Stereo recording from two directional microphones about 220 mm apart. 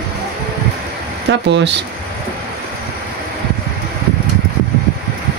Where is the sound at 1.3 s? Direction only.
55° right (ahead or behind).